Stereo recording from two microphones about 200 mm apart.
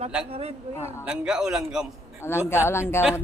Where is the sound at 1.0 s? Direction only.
5° right (ahead or behind).